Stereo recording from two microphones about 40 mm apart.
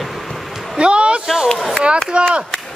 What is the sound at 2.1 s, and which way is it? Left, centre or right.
Speech, right.